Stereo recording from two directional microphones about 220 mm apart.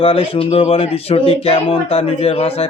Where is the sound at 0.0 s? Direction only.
25° left (ahead or behind).